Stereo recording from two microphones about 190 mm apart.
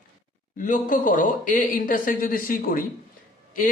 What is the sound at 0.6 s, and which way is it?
A man's voice, 45° left (ahead or behind).